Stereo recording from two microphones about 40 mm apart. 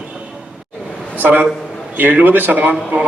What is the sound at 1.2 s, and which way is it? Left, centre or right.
A man's voice, right.